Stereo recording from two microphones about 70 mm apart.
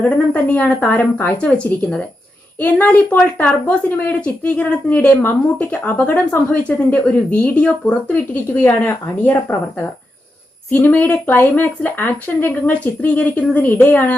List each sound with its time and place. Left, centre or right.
0.0 s speech: left
6.7 s speech: centre
10.7 s speech: left